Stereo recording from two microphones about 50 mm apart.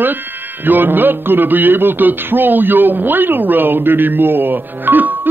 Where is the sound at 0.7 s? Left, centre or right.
Right.